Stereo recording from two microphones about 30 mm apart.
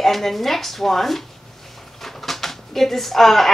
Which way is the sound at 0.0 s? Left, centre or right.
Centre.